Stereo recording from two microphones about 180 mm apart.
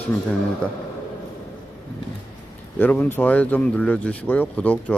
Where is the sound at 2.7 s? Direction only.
10° left (ahead or behind).